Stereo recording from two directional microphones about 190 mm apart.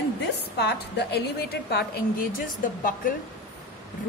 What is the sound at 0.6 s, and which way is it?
A woman's voice, 60° left (ahead or behind).